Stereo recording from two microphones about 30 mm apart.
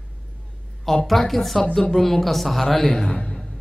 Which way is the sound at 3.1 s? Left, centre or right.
Left.